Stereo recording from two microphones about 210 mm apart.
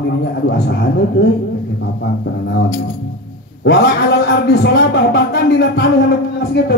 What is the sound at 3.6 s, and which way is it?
A man's voice, 55° left (ahead or behind).